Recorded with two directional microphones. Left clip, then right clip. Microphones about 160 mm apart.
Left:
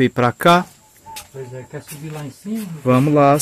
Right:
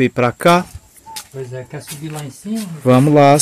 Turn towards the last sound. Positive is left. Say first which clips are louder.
# right 4 dB
turn(degrees=-30)  # may be behind; listen again after turning